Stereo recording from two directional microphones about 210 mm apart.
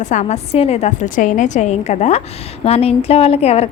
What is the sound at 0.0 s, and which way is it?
A woman's voice, 35° left (ahead or behind).